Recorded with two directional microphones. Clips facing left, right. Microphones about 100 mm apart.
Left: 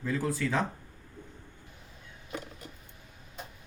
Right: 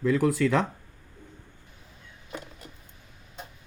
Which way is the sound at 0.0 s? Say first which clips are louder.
Right 8 dB; 90° right.